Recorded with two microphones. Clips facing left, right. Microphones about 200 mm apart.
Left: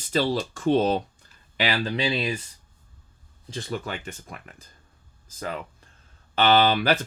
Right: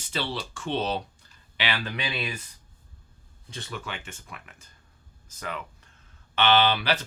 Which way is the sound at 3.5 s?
35° left (ahead or behind).